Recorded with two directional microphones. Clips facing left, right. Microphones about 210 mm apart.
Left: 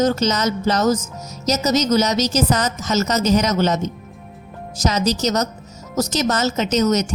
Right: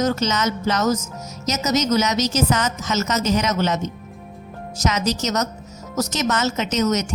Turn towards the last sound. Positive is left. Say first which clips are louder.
# left 3 dB
turn(degrees=35)  # may be behind; listen again after turning